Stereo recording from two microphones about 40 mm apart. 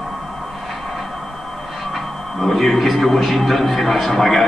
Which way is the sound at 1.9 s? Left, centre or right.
Centre.